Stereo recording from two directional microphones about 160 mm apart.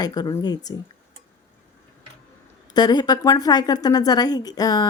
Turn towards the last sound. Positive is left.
turn(degrees=25)  # may be behind; listen again after turning